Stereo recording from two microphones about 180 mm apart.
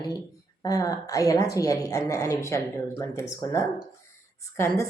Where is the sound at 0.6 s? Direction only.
20° left (ahead or behind).